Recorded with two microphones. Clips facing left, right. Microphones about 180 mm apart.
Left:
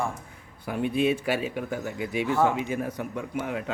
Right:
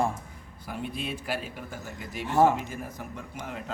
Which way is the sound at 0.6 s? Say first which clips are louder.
Left 10 dB; 65° left (ahead or behind).